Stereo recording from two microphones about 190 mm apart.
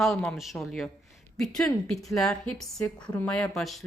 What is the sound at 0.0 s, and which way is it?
Speech, centre (ahead or behind).